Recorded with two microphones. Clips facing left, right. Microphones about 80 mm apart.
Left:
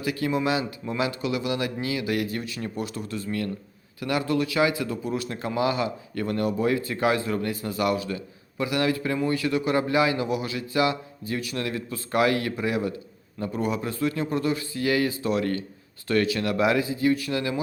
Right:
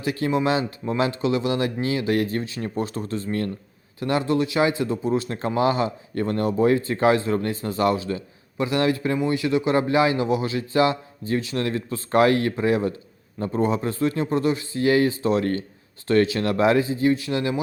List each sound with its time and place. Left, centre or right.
0.0 s speech: right